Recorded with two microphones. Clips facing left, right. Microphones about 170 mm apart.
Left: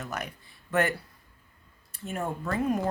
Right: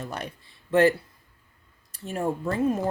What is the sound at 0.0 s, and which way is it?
Speech, 30° right (ahead or behind).